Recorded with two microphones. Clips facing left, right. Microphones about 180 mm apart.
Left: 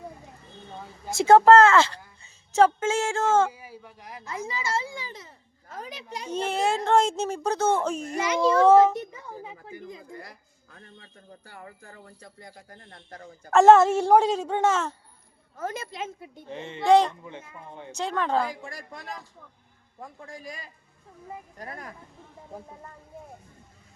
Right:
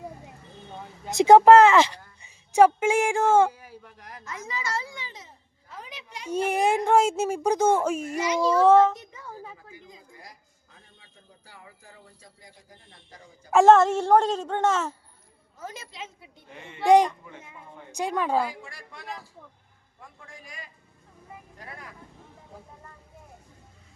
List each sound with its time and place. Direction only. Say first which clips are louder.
1.1 s speech: right 2 dB; 15° right (ahead or behind)
3.5 s a woman's voice: left 2 dB; 10° left (ahead or behind)
4.2 s speech: left 2 dB; 30° left (ahead or behind)
5.0 s a child's voice: left 3 dB; 50° left (ahead or behind)
6.2 s speech: right 2 dB; 10° right (ahead or behind)
8.7 s a woman's voice: left 1 dB; 10° left (ahead or behind)
9.2 s a sound: left 1 dB; 15° left (ahead or behind)
9.7 s a man's voice: left 8 dB; 60° left (ahead or behind)
13.5 s a woman's voice: left 1 dB; centre (ahead or behind)
15.5 s a woman's voice: left 7 dB; 55° left (ahead or behind)
16.5 s speech: left 8 dB; 25° left (ahead or behind)
16.8 s speech: right 1 dB; 15° right (ahead or behind)
18.6 s a woman's voice: left 3 dB; 45° left (ahead or behind)
20.2 s a man's voice: left 4 dB; 35° left (ahead or behind)